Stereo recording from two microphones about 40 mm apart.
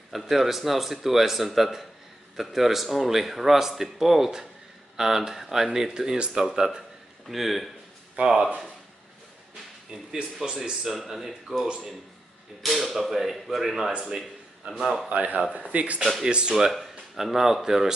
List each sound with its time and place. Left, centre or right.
0.1 s speech: centre
7.2 s speech: centre
8.2 s speech: centre
10.1 s speech: centre
11.6 s speech: centre
12.6 s speech: centre
15.0 s speech: right
16.3 s speech: right
17.1 s speech: centre